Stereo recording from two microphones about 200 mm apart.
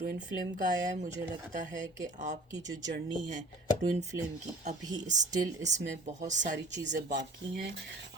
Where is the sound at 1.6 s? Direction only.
40° right (ahead or behind).